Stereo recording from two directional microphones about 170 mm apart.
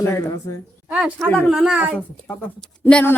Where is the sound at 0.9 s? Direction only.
5° right (ahead or behind).